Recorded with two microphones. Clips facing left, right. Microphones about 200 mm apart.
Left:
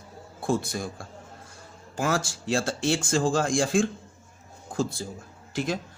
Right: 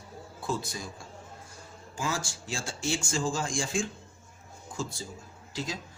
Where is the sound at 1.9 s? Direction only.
60° left (ahead or behind).